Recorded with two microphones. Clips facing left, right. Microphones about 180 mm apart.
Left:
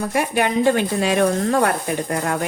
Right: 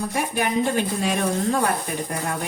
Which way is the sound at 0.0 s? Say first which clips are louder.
Left 4 dB; 70° left (ahead or behind).